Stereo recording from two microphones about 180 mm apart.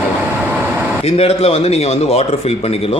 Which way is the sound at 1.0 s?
35° left (ahead or behind).